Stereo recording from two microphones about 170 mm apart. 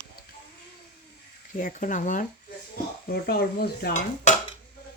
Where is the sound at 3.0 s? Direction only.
65° left (ahead or behind).